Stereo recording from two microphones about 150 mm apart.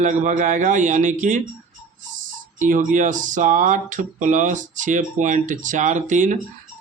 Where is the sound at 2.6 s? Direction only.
60° right (ahead or behind).